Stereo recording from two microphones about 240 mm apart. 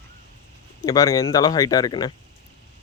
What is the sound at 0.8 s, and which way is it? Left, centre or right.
Speech, centre.